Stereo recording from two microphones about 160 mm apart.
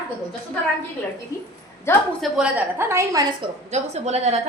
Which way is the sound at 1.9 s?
15° left (ahead or behind).